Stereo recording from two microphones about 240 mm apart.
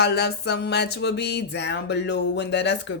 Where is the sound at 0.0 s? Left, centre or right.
Left.